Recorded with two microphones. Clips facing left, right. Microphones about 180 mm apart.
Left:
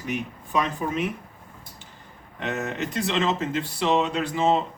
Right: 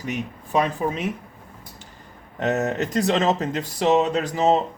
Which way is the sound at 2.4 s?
40° right (ahead or behind).